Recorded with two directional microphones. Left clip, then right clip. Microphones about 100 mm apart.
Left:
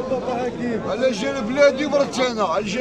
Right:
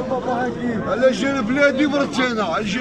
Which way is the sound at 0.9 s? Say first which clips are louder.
Right 5 dB; 25° left (ahead or behind).